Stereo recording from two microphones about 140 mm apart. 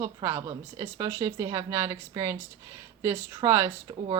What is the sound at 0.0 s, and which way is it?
A woman's voice, 25° right (ahead or behind).